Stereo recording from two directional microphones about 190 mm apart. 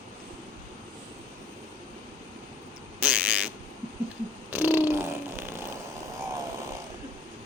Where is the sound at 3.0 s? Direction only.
5° right (ahead or behind).